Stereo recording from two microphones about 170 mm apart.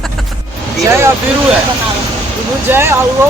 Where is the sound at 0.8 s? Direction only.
15° right (ahead or behind).